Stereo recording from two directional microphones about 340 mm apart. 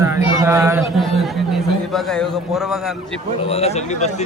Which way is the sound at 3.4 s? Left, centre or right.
Centre.